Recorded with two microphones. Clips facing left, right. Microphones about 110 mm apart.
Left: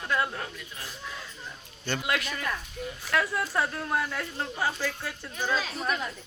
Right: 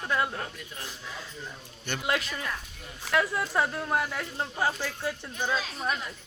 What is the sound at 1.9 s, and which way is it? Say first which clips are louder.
Speech: even; 25° right (ahead or behind).